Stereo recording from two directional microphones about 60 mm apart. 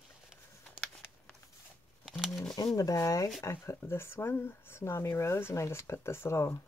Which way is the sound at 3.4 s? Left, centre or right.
Left.